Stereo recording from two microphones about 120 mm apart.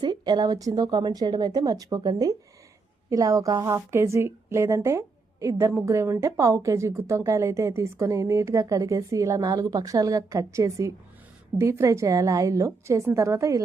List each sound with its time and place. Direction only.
0.0 s a woman's voice: 35° right (ahead or behind)